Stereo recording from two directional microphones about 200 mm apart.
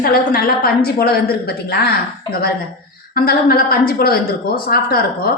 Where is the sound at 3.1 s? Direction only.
50° left (ahead or behind).